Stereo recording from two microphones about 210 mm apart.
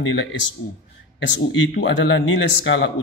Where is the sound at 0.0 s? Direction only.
60° left (ahead or behind).